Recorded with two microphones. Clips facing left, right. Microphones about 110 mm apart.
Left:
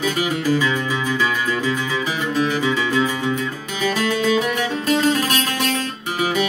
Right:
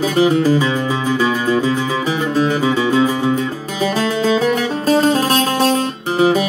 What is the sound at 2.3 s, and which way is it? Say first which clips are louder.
Music: right 4 dB; 35° right (ahead or behind).